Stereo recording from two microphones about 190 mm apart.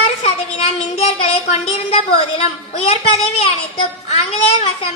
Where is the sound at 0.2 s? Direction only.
30° left (ahead or behind).